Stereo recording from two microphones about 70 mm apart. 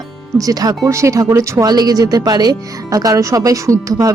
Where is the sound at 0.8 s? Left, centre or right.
Right.